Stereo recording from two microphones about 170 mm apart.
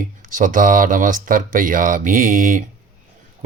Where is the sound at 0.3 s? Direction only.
50° right (ahead or behind).